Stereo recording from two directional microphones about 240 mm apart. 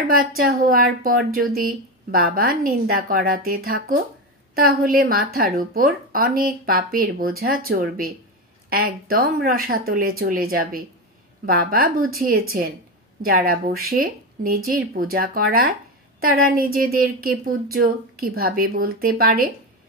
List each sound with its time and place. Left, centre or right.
0.1 s speech: right